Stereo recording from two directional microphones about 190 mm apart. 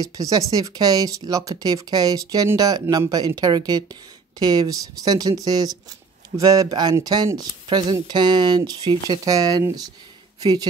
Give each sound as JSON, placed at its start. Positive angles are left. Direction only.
{"t": 0.0, "sound": "speech", "side_deg": -20}